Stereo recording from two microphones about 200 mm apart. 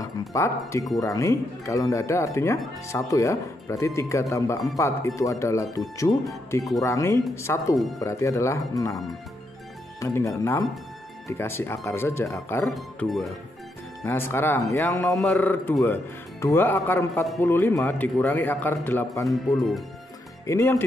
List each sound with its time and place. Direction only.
0.3 s speech: 15° left (ahead or behind)
9.9 s speech: 15° left (ahead or behind)
12.7 s speech: centre (ahead or behind)
14.0 s speech: 10° left (ahead or behind)
19.2 s speech: centre (ahead or behind)
20.4 s speech: 15° left (ahead or behind)